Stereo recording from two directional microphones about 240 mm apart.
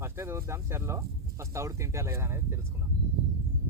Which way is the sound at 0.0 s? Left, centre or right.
Centre.